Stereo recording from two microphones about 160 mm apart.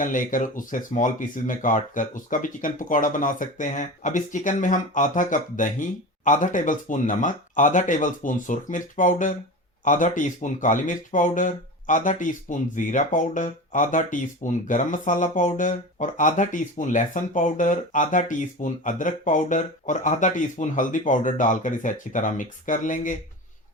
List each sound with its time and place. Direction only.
0.0 s speech: 55° left (ahead or behind)